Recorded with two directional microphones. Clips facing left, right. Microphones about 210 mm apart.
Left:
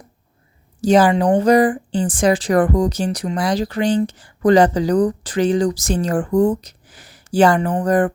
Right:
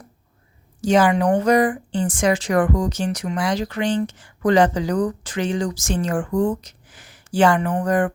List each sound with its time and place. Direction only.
0.8 s speech: 35° left (ahead or behind)